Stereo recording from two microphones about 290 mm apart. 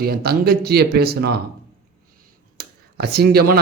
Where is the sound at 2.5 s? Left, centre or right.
Right.